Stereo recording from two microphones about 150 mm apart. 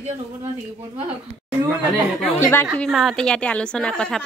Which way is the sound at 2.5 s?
15° left (ahead or behind).